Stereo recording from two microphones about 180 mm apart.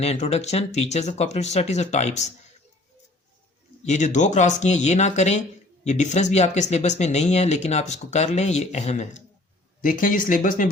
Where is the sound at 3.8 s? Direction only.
40° left (ahead or behind).